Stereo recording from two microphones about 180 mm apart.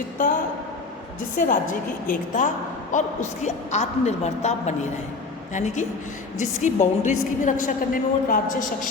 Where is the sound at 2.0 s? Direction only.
45° left (ahead or behind).